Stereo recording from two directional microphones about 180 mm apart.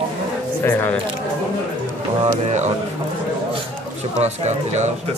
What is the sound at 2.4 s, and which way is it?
Speech, 40° right (ahead or behind).